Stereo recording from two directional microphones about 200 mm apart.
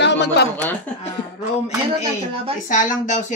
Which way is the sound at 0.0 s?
60° left (ahead or behind).